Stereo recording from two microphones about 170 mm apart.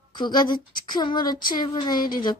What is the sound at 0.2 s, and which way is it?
A woman's voice, 25° left (ahead or behind).